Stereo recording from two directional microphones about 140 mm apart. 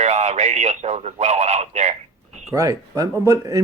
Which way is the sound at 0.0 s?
55° right (ahead or behind).